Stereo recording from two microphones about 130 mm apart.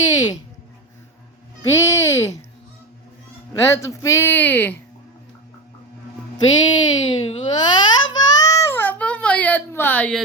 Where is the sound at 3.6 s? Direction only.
25° left (ahead or behind).